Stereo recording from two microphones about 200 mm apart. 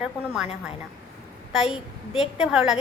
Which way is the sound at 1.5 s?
Centre (ahead or behind).